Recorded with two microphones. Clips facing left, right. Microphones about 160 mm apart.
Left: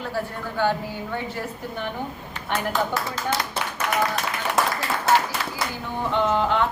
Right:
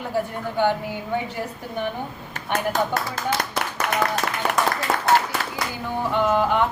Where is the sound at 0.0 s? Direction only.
15° right (ahead or behind).